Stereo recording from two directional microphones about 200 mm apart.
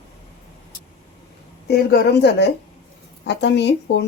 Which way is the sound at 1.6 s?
55° left (ahead or behind).